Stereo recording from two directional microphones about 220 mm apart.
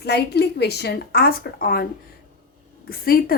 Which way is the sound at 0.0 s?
50° left (ahead or behind).